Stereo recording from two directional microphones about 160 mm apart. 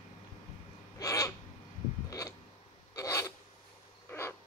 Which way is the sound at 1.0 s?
20° left (ahead or behind).